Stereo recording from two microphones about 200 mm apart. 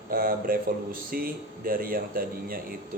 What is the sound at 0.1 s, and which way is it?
Speech, 45° right (ahead or behind).